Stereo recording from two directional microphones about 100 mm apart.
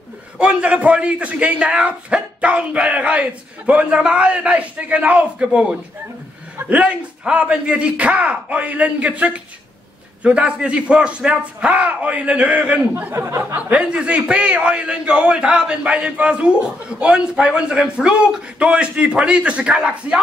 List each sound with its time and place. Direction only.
0.4 s speech: 10° right (ahead or behind)
13.1 s speech: 25° right (ahead or behind)
13.6 s speech: 15° right (ahead or behind)